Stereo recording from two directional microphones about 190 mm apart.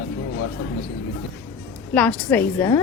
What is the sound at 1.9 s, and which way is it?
Speech, 10° left (ahead or behind).